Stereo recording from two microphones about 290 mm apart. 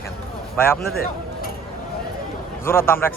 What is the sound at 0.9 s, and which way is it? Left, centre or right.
Chink, left.